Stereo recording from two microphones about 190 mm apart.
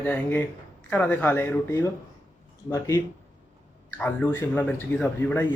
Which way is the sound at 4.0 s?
10° left (ahead or behind).